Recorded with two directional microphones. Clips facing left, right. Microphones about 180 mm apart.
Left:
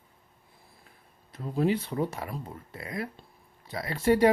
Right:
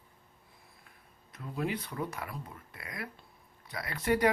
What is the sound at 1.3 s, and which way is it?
Speech, 30° left (ahead or behind).